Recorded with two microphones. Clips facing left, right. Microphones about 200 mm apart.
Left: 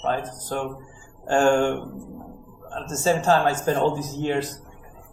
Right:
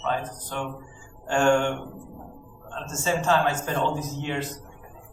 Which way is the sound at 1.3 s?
35° left (ahead or behind).